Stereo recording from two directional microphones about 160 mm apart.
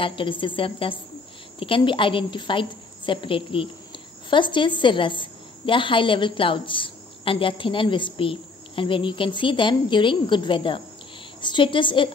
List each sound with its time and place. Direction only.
0.0 s a woman's voice: 30° left (ahead or behind)